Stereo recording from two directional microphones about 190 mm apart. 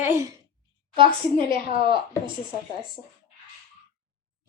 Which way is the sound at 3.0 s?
35° left (ahead or behind).